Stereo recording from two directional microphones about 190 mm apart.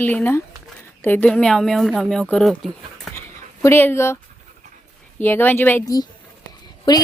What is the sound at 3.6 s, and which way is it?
Speech, 10° left (ahead or behind).